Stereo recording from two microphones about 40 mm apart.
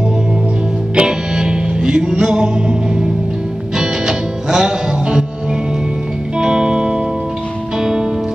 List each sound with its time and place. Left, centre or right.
0.9 s music: centre
6.3 s music: right